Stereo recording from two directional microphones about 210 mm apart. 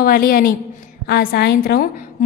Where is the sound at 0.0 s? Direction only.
45° left (ahead or behind).